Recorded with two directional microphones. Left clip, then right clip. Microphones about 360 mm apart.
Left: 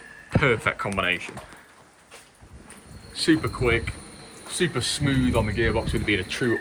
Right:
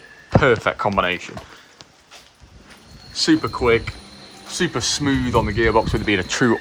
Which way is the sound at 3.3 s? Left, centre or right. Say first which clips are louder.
Right 5 dB; centre.